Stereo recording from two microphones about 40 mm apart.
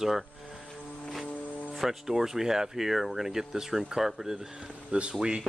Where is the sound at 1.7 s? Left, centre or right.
Centre.